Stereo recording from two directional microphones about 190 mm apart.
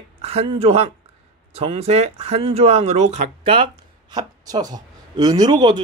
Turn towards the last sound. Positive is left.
turn(degrees=-20)  # may be behind; listen again after turning